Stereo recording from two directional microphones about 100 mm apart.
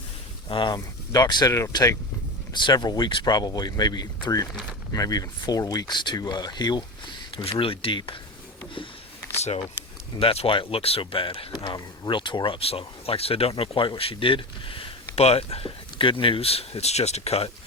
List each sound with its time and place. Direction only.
0.4 s speech: 55° left (ahead or behind); by 2.0 s 35° left (ahead or behind)
2.5 s speech: 50° left (ahead or behind)
7.6 s speech: 65° left (ahead or behind)
9.4 s speech: 90° left
10.2 s speech: 65° left (ahead or behind)
11.5 s speech: 50° left (ahead or behind)
12.5 s speech: 75° left (ahead or behind); by 17.5 s 90° left